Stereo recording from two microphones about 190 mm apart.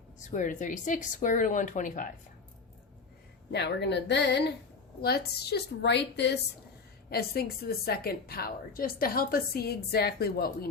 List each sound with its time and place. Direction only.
0.3 s speech: 40° left (ahead or behind)
3.5 s a woman's voice: 65° left (ahead or behind)